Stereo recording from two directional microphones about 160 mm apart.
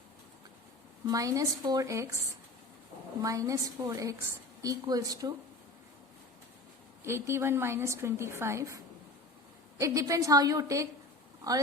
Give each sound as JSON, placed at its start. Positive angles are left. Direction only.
{"t": 1.0, "sound": "a woman's voice", "side_deg": -20}
{"t": 3.2, "sound": "a woman's voice", "side_deg": -20}
{"t": 7.0, "sound": "a woman's voice", "side_deg": -15}